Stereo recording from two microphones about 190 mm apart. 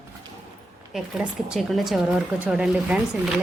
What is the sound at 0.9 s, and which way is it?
Speech, centre (ahead or behind).